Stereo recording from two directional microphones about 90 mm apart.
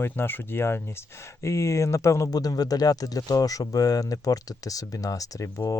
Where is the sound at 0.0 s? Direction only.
25° left (ahead or behind).